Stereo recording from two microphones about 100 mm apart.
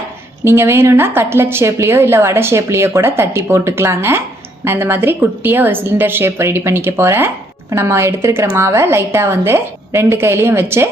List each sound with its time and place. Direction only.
0.4 s a woman's voice: 25° right (ahead or behind)